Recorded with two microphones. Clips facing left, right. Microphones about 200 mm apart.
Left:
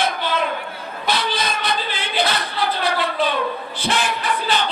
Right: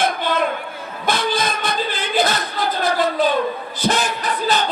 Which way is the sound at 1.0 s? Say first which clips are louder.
Right 3 dB; 50° right (ahead or behind).